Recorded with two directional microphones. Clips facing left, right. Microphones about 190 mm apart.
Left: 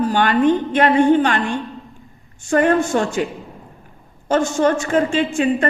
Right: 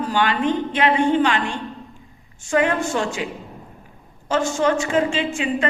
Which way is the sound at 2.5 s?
50° left (ahead or behind).